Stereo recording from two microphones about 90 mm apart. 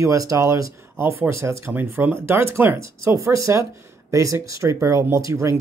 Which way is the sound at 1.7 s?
20° right (ahead or behind).